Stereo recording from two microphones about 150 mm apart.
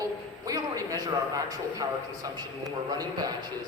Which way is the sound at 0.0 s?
25° right (ahead or behind).